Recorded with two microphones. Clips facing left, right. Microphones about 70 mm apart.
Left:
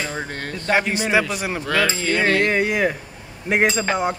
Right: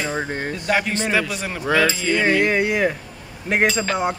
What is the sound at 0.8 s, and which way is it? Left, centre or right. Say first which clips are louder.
Speech: left 2 dB; centre.